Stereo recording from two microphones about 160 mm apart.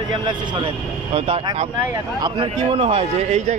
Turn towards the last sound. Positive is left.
turn(degrees=-40)  # may be behind; listen again after turning